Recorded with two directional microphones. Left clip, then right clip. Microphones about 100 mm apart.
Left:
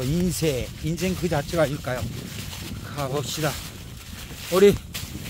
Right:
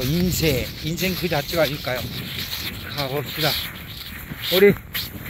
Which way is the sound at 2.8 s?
5° left (ahead or behind).